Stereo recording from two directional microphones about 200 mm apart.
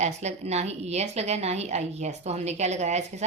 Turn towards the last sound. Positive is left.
turn(degrees=-35)  # may be behind; listen again after turning